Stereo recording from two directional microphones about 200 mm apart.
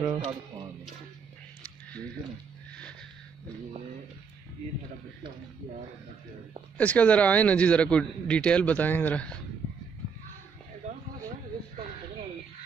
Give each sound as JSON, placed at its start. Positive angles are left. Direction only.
{"t": 0.0, "sound": "speech", "side_deg": -20}
{"t": 2.7, "sound": "wheeze", "side_deg": 5}
{"t": 6.8, "sound": "a man's voice", "side_deg": 5}